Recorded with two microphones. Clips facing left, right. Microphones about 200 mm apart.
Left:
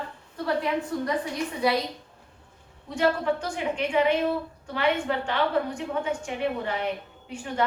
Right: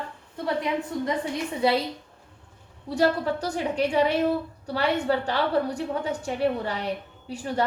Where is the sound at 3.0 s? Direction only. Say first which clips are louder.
Right 1 dB; 35° right (ahead or behind).